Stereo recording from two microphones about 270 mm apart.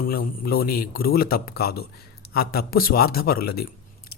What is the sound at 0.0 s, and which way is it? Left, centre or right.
Speech, left.